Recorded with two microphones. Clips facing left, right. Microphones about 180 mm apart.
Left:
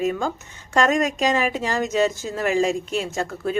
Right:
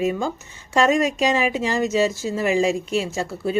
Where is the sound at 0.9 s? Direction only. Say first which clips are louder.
Right 1 dB; 45° left (ahead or behind).